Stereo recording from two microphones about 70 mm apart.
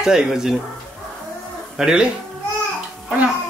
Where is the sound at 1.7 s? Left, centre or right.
Centre.